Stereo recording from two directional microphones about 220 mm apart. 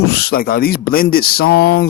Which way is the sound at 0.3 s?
40° left (ahead or behind).